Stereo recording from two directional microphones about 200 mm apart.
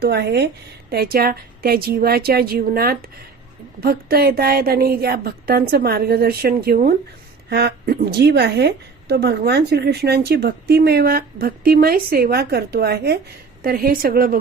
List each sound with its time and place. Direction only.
0.0 s a woman's voice: 55° right (ahead or behind)